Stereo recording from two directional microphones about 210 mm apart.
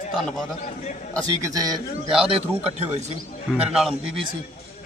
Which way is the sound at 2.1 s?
5° right (ahead or behind).